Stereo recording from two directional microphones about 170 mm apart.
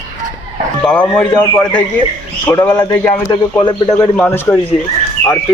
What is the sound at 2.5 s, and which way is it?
Speech, 20° left (ahead or behind).